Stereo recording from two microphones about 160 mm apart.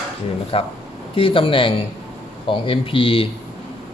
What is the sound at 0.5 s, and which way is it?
Speech, 35° left (ahead or behind).